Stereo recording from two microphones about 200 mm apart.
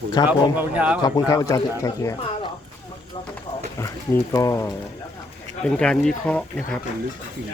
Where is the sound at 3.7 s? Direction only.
15° left (ahead or behind).